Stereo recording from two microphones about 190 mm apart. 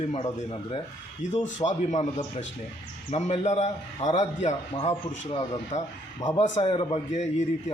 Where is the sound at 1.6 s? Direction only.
35° left (ahead or behind).